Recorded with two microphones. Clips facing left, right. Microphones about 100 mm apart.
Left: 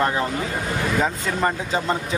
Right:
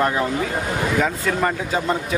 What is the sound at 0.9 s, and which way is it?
Speech, 15° left (ahead or behind).